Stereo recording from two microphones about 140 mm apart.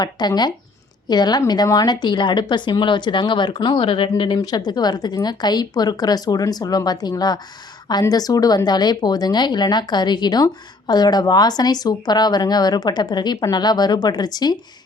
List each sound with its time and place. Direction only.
0.0 s a woman's voice: 30° left (ahead or behind)